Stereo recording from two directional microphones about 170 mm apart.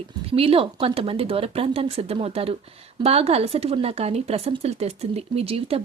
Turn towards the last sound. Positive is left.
turn(degrees=-35)  # may be behind; listen again after turning